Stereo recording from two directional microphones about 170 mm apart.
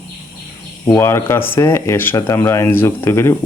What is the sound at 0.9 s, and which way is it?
Speech, 15° left (ahead or behind).